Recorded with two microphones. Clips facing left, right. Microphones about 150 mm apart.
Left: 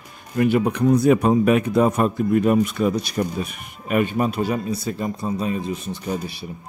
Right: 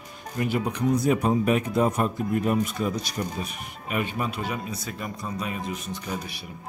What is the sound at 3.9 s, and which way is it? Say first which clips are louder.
A man's voice: left 8 dB; 45° left (ahead or behind).